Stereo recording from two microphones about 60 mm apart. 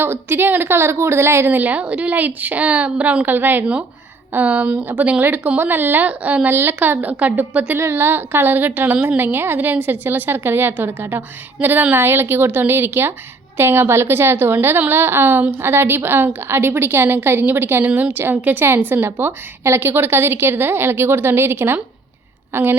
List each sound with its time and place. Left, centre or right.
0.0 s a woman's voice: right
6.5 s a woman's voice: right
7.8 s a woman's voice: right